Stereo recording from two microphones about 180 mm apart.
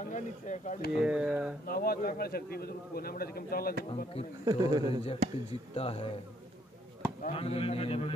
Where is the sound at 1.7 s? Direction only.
55° left (ahead or behind).